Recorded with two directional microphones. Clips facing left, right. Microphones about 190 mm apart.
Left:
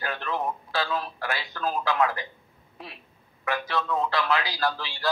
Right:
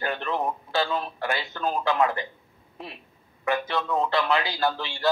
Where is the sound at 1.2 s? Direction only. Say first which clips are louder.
Right 3 dB; centre (ahead or behind).